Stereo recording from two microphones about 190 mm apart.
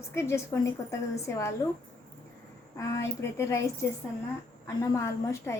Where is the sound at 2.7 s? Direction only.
15° left (ahead or behind).